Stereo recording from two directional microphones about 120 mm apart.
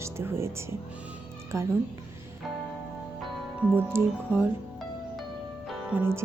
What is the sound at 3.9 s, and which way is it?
Speech, 20° right (ahead or behind).